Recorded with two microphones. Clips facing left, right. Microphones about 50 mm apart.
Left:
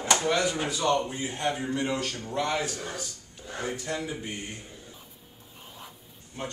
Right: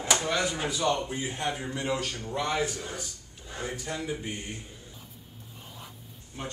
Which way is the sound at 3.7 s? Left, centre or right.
Centre.